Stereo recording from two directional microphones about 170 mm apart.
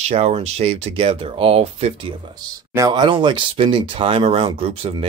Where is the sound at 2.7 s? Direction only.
25° right (ahead or behind).